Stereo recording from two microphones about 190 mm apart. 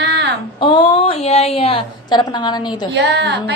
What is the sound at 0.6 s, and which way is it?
A woman's voice, 25° left (ahead or behind).